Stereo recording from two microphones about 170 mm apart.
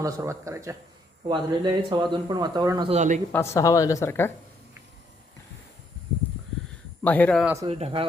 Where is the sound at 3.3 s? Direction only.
15° left (ahead or behind).